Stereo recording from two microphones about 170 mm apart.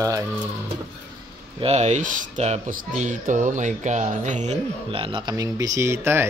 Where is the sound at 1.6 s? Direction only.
40° right (ahead or behind).